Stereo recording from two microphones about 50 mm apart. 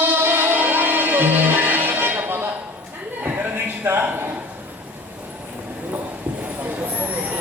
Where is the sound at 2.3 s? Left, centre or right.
Right.